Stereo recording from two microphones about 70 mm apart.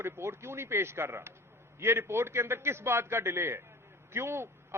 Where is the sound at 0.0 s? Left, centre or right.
Right.